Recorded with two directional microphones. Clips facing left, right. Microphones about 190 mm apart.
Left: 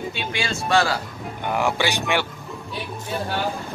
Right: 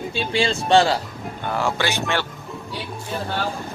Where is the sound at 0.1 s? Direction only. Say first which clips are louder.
Right 6 dB; 30° right (ahead or behind).